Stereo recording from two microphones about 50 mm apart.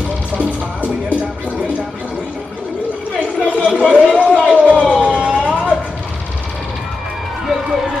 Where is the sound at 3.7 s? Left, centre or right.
Centre.